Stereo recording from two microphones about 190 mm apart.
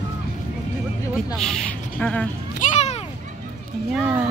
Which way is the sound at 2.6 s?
35° left (ahead or behind).